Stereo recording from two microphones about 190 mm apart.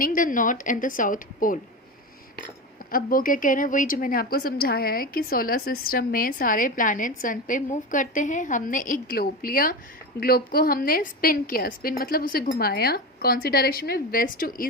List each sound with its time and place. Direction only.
0.0 s a woman's voice: 45° left (ahead or behind)
2.9 s a woman's voice: 50° left (ahead or behind)